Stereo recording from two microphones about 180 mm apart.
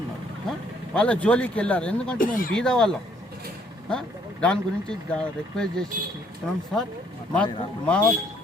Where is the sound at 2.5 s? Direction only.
5° left (ahead or behind).